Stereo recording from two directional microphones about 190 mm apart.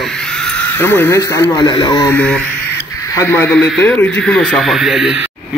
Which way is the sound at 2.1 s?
5° left (ahead or behind).